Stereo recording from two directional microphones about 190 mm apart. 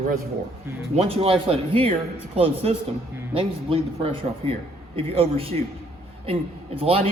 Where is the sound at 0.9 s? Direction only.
30° right (ahead or behind).